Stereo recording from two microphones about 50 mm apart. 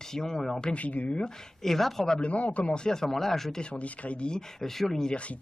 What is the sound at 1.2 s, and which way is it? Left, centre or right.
Speech, centre.